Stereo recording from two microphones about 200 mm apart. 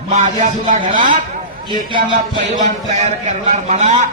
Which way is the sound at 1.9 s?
25° right (ahead or behind).